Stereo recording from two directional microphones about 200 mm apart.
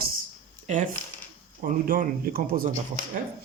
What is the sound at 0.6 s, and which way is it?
Speech, 40° right (ahead or behind).